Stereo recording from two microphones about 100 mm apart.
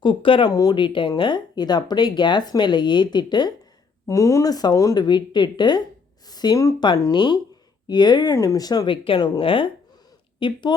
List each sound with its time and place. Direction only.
0.0 s speech: 55° left (ahead or behind)
0.5 s speech: 35° left (ahead or behind)
0.8 s speech: 55° left (ahead or behind)
4.1 s speech: 30° left (ahead or behind)
5.0 s speech: 50° left (ahead or behind); by 6.7 s 35° left (ahead or behind)
6.7 s speech: 45° left (ahead or behind)
8.9 s speech: 50° left (ahead or behind)